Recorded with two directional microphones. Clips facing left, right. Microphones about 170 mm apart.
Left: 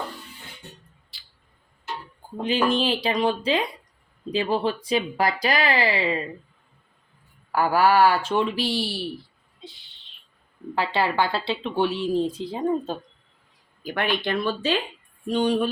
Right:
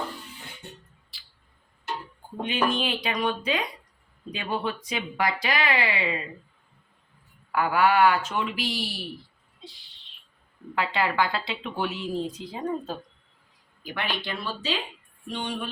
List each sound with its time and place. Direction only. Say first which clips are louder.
2.2 s a sound: left 3 dB; 35° left (ahead or behind)
2.6 s speech: left 5 dB; 30° left (ahead or behind)
7.5 s speech: left 3 dB; 35° left (ahead or behind)
9.6 s a sound: left 3 dB; centre (ahead or behind)
10.8 s speech: left 2 dB; 30° left (ahead or behind)
13.8 s speech: left 6 dB; 50° left (ahead or behind)
15.3 s speech: left 10 dB; 40° left (ahead or behind)